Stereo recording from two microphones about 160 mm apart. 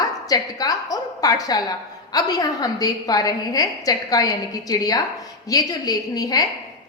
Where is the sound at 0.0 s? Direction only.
25° left (ahead or behind).